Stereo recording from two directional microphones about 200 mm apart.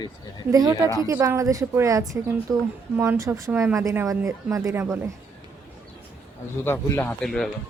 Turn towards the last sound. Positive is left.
turn(degrees=0)  # may be behind; listen again after turning